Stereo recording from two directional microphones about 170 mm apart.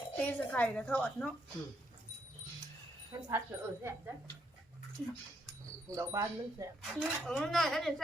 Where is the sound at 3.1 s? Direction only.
15° right (ahead or behind).